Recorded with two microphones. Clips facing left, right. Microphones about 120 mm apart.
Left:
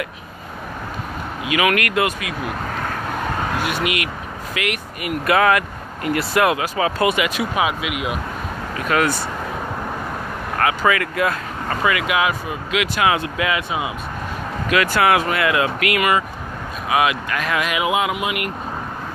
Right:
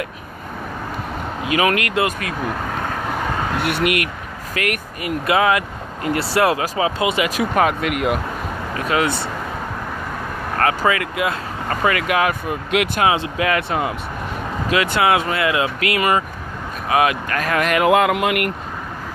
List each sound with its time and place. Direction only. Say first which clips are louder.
1.5 s speech: even; 35° right (ahead or behind)
3.6 s speech: right 3 dB; 60° right (ahead or behind)
4.6 s speech: right 2 dB; 40° right (ahead or behind)
5.0 s speech: left 1 dB; 25° right (ahead or behind); by 7.9 s 50° right (ahead or behind)
8.9 s speech: left 1 dB; 25° right (ahead or behind)
10.6 s speech: right 1 dB; 40° right (ahead or behind)
10.9 s speech: left 1 dB; 25° right (ahead or behind)
11.8 s speech: right 1 dB; 40° right (ahead or behind)
13.0 s speech: right 1 dB; 30° right (ahead or behind)
13.5 s speech: right 5 dB; 55° right (ahead or behind)
14.7 s speech: even; 25° right (ahead or behind); by 18.5 s 65° right (ahead or behind)